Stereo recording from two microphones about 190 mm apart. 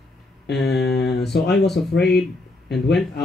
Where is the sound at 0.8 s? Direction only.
60° left (ahead or behind).